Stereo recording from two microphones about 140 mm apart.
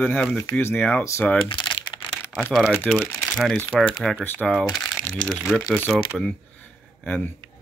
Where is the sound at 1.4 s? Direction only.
35° left (ahead or behind).